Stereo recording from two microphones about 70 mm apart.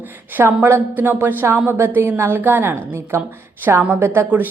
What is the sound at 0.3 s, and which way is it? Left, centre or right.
Speech, right.